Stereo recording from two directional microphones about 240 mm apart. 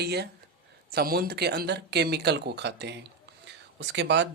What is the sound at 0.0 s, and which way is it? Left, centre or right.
Speech, right.